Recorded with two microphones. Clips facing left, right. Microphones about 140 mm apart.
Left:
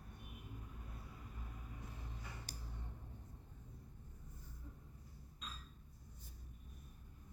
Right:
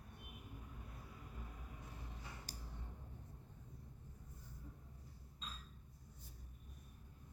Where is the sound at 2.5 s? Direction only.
65° left (ahead or behind).